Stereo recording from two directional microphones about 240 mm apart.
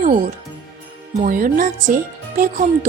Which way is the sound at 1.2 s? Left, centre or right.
Right.